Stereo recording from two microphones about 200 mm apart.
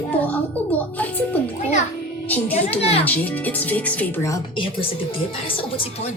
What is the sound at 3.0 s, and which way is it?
Speech, 10° left (ahead or behind).